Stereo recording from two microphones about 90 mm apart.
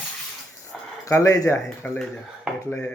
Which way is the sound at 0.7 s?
10° left (ahead or behind).